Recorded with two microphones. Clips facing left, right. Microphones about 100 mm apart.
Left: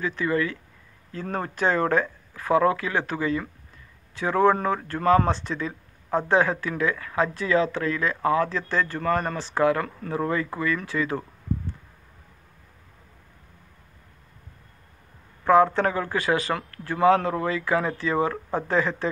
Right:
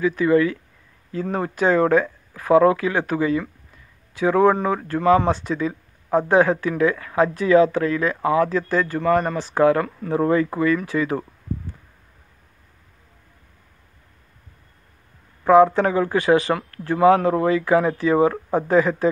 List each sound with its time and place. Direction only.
0.0 s speech: 15° right (ahead or behind)
9.6 s speech: 25° right (ahead or behind)
15.4 s speech: 10° right (ahead or behind)